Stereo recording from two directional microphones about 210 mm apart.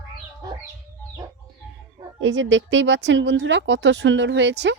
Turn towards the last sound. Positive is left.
turn(degrees=-55)  # may be behind; listen again after turning